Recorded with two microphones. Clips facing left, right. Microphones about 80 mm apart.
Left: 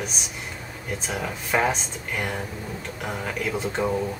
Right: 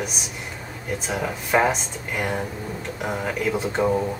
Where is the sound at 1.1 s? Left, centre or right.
Centre.